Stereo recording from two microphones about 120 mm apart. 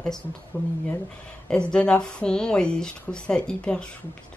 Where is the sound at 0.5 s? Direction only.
20° left (ahead or behind).